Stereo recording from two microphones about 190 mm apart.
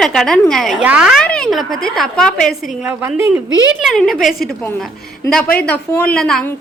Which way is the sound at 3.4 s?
80° right.